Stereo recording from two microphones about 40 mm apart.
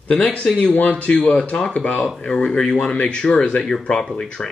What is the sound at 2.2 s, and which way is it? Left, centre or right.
Speech, centre.